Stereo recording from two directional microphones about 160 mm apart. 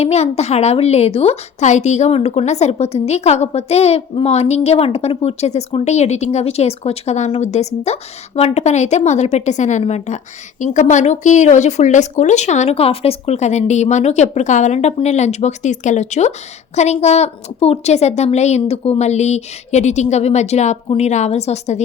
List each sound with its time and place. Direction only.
0.0 s a woman's voice: 40° left (ahead or behind)